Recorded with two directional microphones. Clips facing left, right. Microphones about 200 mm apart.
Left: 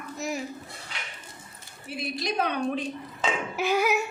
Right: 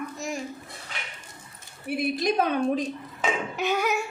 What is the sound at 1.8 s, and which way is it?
Speech, 50° right (ahead or behind).